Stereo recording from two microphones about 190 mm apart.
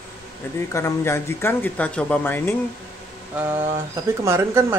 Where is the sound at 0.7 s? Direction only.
15° left (ahead or behind).